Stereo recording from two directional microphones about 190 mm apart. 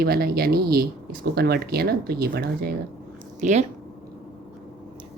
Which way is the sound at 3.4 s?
40° right (ahead or behind).